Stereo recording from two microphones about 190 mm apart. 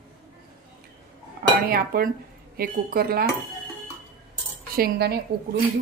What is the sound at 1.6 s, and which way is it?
A woman's voice, 50° right (ahead or behind).